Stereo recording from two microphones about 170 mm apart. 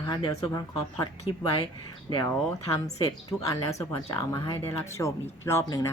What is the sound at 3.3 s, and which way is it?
Speech, 20° left (ahead or behind).